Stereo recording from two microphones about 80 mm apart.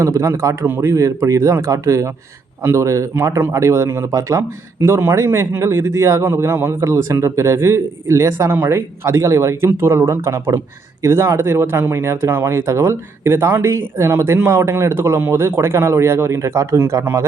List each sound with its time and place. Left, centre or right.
0.0 s a man's voice: right